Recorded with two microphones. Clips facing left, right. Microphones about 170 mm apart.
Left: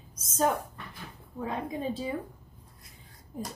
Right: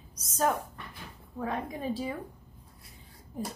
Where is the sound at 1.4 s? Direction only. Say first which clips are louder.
Left 1 dB; 20° left (ahead or behind).